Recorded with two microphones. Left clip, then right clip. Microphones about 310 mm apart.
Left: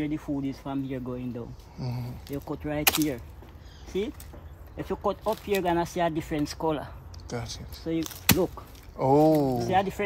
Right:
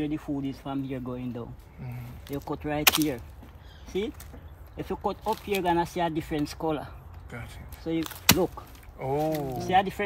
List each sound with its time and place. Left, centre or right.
0.0 s speech: centre
9.0 s speech: left
9.7 s speech: centre